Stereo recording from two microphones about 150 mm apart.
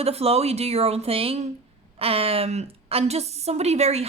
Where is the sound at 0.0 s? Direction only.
45° right (ahead or behind).